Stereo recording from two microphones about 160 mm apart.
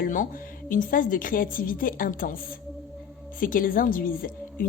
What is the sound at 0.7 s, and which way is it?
A woman's voice, 55° left (ahead or behind).